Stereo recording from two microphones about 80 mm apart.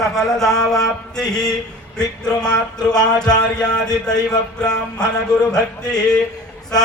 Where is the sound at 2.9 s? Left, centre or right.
Left.